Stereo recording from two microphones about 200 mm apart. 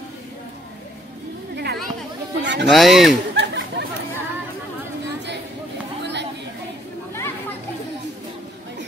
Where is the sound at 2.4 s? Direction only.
60° right (ahead or behind).